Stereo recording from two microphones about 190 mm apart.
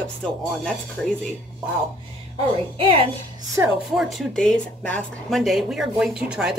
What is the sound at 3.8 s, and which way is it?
Speech, centre (ahead or behind).